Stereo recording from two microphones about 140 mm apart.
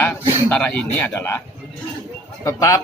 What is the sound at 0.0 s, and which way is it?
Speech, 10° left (ahead or behind).